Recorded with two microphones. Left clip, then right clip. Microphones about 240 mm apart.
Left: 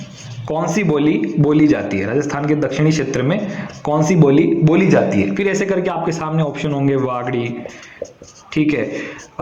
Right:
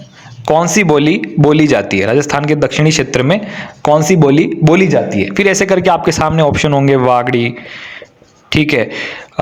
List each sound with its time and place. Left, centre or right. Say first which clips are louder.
0.4 s speech: right 9 dB; right
8.4 s speech: right 5 dB; right